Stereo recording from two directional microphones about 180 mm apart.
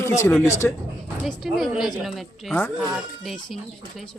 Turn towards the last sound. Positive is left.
turn(degrees=0)  # may be behind; listen again after turning